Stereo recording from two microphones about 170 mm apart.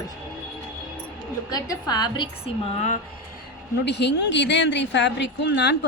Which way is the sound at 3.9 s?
90° left.